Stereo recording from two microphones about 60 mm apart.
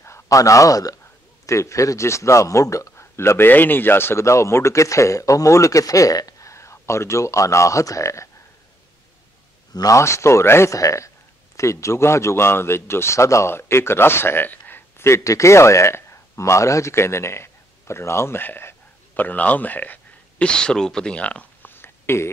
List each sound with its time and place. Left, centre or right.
0.3 s a man's voice: left
1.4 s speech: left
9.8 s a man's voice: left
10.7 s a man's voice: left
15.0 s speech: left
16.9 s speech: left
18.4 s speech: left
20.4 s speech: centre
21.6 s a sound: left